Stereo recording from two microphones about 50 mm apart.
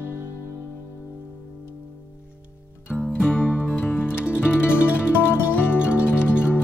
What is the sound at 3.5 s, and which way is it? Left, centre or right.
Music, centre.